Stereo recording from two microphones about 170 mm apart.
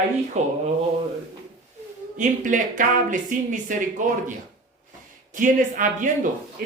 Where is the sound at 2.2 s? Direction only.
50° right (ahead or behind).